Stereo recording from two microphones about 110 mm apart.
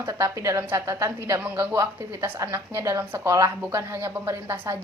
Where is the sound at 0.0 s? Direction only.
30° right (ahead or behind).